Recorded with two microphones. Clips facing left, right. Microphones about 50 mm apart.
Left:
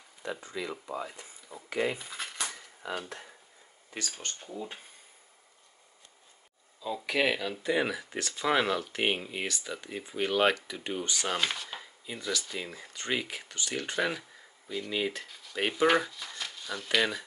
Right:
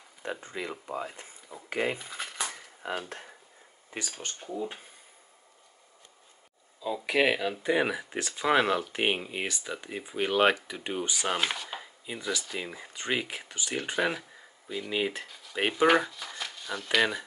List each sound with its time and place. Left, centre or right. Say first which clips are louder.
0.2 s speech: right 1 dB; right
2.1 s dishes: right 1 dB; centre
2.8 s speech: right 2 dB; right
4.2 s speech: right 4 dB; centre
6.8 s speech: right 3 dB; centre